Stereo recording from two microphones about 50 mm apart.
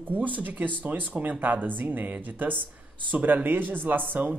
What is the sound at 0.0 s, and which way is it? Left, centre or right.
Speech, right.